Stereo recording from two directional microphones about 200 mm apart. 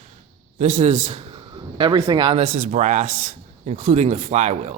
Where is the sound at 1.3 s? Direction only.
25° right (ahead or behind).